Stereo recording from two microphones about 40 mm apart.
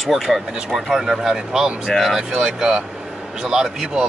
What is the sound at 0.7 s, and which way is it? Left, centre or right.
Speech, centre.